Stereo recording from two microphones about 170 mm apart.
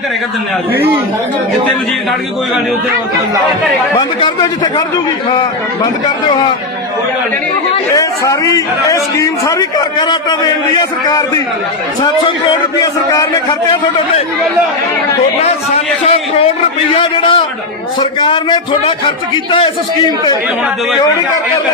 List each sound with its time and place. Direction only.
3.9 s a man's voice: 20° left (ahead or behind)
7.9 s a man's voice: 20° left (ahead or behind)
12.8 s a man's voice: 20° left (ahead or behind)
15.4 s a man's voice: 35° left (ahead or behind)